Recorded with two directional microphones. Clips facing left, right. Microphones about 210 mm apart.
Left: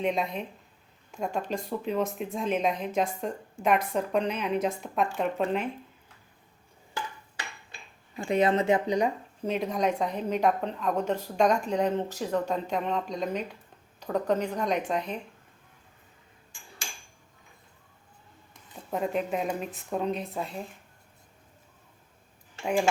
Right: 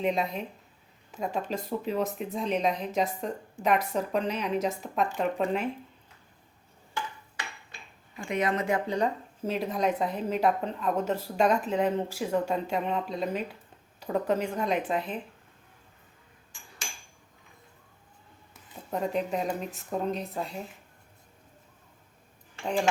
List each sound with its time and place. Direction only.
0.0 s a woman's voice: centre (ahead or behind)
8.1 s speech: 30° left (ahead or behind)
9.4 s a woman's voice: centre (ahead or behind)
18.5 s a woman's voice: centre (ahead or behind)
22.6 s speech: 10° left (ahead or behind)